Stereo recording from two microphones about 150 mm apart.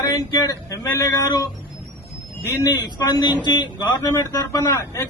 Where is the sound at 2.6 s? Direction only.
25° left (ahead or behind).